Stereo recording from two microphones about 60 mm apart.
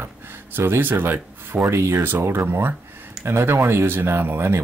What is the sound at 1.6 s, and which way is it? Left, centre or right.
Speech, right.